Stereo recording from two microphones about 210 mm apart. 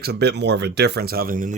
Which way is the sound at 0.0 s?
50° right (ahead or behind).